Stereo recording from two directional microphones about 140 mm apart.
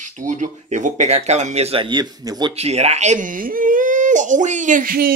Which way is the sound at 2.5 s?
50° right (ahead or behind).